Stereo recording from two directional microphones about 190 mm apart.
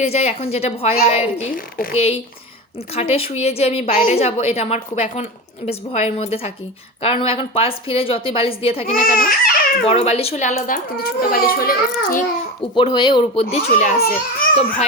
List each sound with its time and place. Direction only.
0.0 s a woman's voice: 35° left (ahead or behind)
8.9 s speech: 45° left (ahead or behind)
9.8 s a woman's voice: 30° left (ahead or behind)
10.9 s a child's voice: 50° left (ahead or behind)
12.7 s speech: 25° left (ahead or behind); by 13.9 s 40° left (ahead or behind)
14.0 s a child's voice: 50° left (ahead or behind)